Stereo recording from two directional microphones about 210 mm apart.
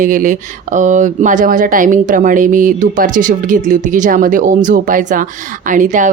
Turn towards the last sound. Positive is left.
turn(degrees=-35)  # may be behind; listen again after turning